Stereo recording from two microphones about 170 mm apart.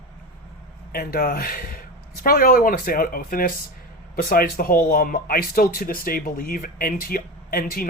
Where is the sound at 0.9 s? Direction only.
60° left (ahead or behind).